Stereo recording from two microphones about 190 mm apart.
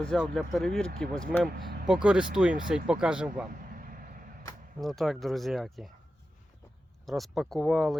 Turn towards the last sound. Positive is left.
turn(degrees=0)  # may be behind; listen again after turning